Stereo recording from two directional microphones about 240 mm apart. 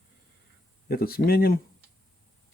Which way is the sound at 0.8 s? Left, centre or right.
Left.